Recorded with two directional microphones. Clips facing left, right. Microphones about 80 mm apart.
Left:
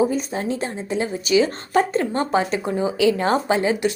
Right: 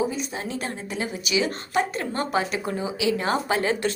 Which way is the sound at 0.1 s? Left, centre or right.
Left.